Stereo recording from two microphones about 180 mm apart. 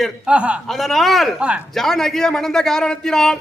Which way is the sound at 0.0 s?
5° right (ahead or behind).